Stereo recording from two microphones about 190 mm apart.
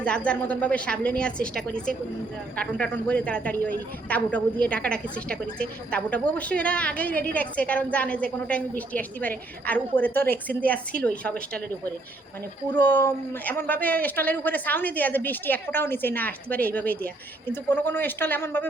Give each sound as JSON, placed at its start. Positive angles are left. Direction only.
{"t": 0.0, "sound": "a man's voice", "side_deg": 5}
{"t": 12.7, "sound": "a man's voice", "side_deg": 10}